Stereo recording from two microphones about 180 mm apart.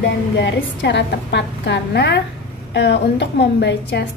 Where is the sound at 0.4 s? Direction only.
75° left (ahead or behind).